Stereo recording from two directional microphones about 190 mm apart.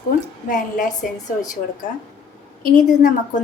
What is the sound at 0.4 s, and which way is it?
Speech, 45° left (ahead or behind).